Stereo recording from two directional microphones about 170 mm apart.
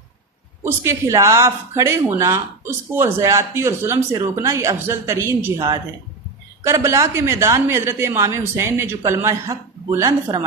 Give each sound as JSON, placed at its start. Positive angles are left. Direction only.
{"t": 0.7, "sound": "speech", "side_deg": -15}